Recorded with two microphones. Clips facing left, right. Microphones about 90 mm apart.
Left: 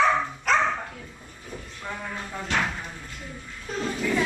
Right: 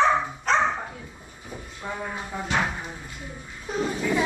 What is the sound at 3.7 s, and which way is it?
Vehicle, 15° right (ahead or behind).